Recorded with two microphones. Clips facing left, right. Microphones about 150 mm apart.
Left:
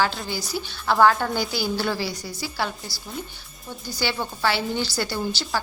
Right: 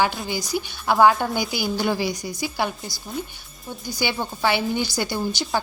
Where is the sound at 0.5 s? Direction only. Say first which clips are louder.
Right 2 dB; 15° right (ahead or behind).